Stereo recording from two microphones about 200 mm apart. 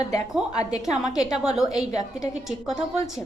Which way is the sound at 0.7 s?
20° left (ahead or behind).